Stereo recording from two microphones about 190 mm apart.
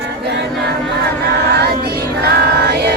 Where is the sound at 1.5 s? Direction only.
55° right (ahead or behind).